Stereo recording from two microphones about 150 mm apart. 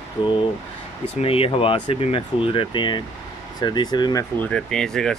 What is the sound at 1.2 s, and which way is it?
Speech, 40° left (ahead or behind).